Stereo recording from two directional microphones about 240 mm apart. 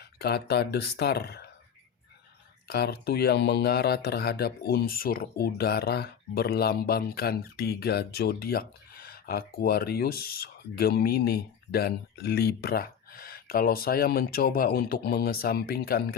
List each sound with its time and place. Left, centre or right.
0.0 s speech: left
2.6 s speech: left